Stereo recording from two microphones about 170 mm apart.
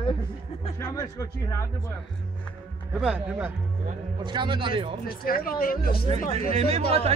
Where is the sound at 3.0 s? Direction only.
5° right (ahead or behind).